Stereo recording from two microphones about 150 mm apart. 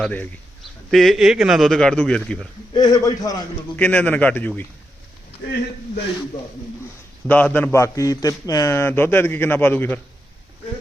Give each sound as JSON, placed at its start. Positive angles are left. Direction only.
{"t": 0.0, "sound": "a man's voice", "side_deg": 10}
{"t": 2.7, "sound": "a man's voice", "side_deg": 25}
{"t": 3.8, "sound": "a man's voice", "side_deg": 10}
{"t": 7.3, "sound": "a man's voice", "side_deg": 10}